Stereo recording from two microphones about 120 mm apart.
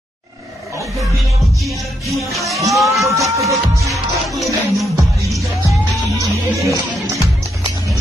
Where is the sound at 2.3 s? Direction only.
Centre (ahead or behind).